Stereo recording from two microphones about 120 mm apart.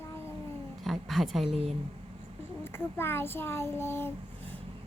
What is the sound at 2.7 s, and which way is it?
Speech, 20° left (ahead or behind).